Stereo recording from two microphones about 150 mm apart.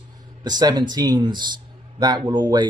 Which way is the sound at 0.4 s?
30° right (ahead or behind).